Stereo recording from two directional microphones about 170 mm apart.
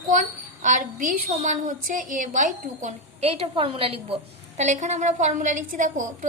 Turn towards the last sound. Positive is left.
turn(degrees=-50)  # may be behind; listen again after turning